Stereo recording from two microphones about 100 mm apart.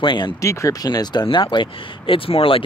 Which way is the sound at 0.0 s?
50° left (ahead or behind).